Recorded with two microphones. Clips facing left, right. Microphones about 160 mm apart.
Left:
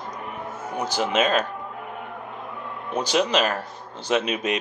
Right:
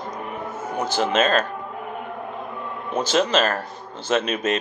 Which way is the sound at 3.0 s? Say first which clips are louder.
Right 2 dB; 15° left (ahead or behind).